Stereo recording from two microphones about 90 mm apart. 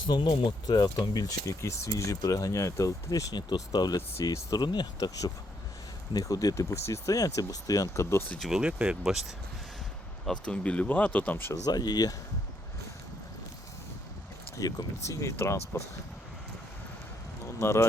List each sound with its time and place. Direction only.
0.0 s speech: 60° left (ahead or behind); by 4.6 s 35° left (ahead or behind)
4.6 s speech: 55° left (ahead or behind)
8.4 s speech: 5° right (ahead or behind)
10.4 s speech: 10° left (ahead or behind)
11.6 s speech: 50° left (ahead or behind)
14.5 s speech: 40° left (ahead or behind)
17.4 s speech: 30° left (ahead or behind)